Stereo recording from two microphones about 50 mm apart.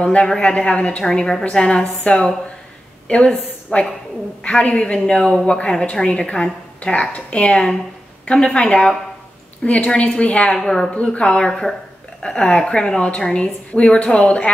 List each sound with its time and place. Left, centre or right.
0.0 s a woman's voice: left
1.0 s a woman's voice: centre